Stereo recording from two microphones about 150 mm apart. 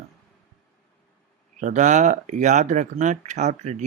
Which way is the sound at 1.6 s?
55° right (ahead or behind).